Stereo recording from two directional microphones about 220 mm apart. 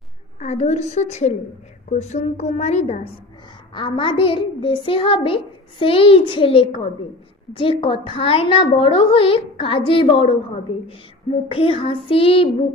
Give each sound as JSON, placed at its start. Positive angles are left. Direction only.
{"t": 0.4, "sound": "a woman's voice", "side_deg": 30}
{"t": 11.4, "sound": "a child's voice", "side_deg": 25}